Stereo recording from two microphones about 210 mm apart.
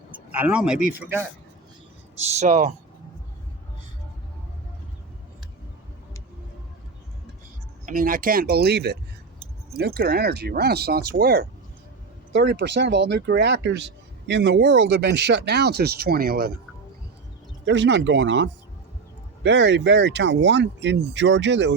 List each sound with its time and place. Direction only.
0.3 s a man's voice: 5° right (ahead or behind)
2.2 s speech: 30° right (ahead or behind)
7.9 s speech: 40° right (ahead or behind)
17.7 s speech: 60° right (ahead or behind)